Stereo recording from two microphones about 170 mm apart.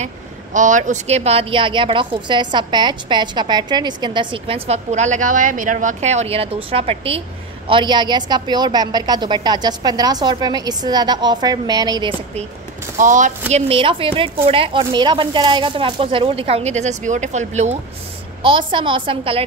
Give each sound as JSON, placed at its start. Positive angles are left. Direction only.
{"t": 0.0, "sound": "a woman's voice", "side_deg": -45}
{"t": 12.9, "sound": "speech", "side_deg": -45}
{"t": 13.5, "sound": "speech", "side_deg": -35}
{"t": 18.4, "sound": "a woman's voice", "side_deg": -30}